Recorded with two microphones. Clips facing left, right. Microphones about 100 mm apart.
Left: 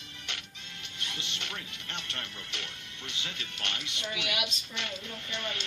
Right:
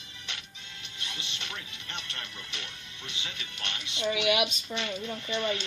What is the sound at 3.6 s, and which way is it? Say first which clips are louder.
Speech: right 5 dB; 20° right (ahead or behind).